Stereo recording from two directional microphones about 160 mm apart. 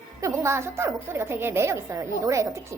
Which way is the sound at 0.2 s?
20° right (ahead or behind).